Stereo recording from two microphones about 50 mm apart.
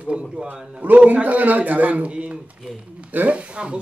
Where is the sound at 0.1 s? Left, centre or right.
Centre.